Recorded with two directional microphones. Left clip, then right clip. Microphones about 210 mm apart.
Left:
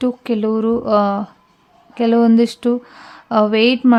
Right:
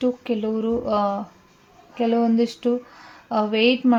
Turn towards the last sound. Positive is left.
turn(degrees=25)  # may be behind; listen again after turning